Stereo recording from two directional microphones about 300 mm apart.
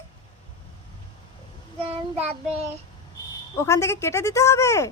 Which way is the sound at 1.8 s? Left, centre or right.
Centre.